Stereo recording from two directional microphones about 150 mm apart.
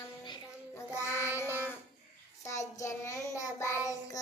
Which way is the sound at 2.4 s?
20° left (ahead or behind).